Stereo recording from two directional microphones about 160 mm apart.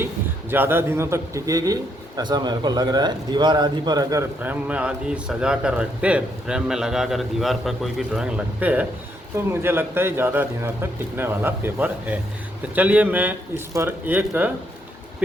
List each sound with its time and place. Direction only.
0.5 s a man's voice: 15° right (ahead or behind)
4.4 s a man's voice: 5° right (ahead or behind)